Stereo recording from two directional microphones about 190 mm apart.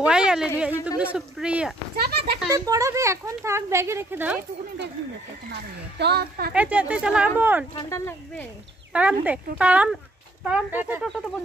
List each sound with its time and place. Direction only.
0.0 s a sound: 5° right (ahead or behind)
0.8 s speech: 5° right (ahead or behind)
2.0 s speech: 55° right (ahead or behind)
2.5 s speech: 15° right (ahead or behind)
5.5 s speech: 60° right (ahead or behind)
6.5 s speech: 5° right (ahead or behind)
8.9 s speech: 5° right (ahead or behind)